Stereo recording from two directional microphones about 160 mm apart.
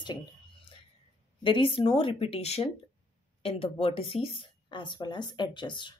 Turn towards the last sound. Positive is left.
turn(degrees=30)  # may be behind; listen again after turning